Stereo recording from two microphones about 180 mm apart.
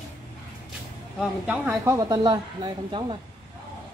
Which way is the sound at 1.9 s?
25° right (ahead or behind).